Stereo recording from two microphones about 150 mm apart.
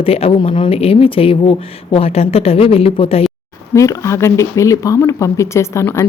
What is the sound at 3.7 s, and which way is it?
Speech, 20° left (ahead or behind).